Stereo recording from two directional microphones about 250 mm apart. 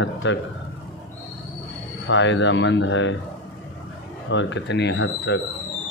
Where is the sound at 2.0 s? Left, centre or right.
Left.